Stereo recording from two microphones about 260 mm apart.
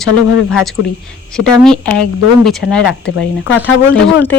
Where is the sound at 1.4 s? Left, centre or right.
Centre.